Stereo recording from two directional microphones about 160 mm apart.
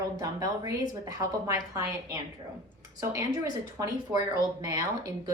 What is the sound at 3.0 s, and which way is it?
Speech, 20° right (ahead or behind).